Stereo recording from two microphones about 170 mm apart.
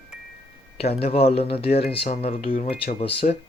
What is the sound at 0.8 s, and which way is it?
Speech, 35° left (ahead or behind).